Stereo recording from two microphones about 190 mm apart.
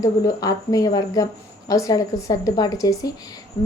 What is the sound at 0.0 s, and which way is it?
A woman's voice, 20° left (ahead or behind).